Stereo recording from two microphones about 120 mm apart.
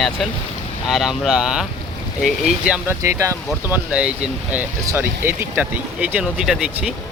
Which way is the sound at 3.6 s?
15° right (ahead or behind).